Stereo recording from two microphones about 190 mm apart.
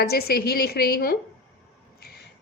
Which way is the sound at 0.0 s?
55° left (ahead or behind).